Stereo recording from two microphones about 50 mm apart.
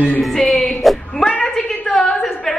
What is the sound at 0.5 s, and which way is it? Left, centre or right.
Music, centre.